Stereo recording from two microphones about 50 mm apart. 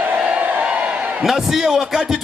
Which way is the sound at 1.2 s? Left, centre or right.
Centre.